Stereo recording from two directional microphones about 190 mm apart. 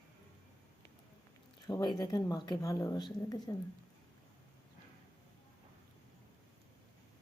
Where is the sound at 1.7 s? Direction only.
20° left (ahead or behind).